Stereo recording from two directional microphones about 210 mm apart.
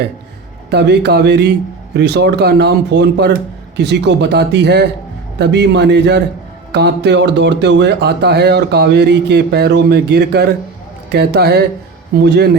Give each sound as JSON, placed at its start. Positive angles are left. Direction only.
{"t": 0.7, "sound": "a man's voice", "side_deg": -50}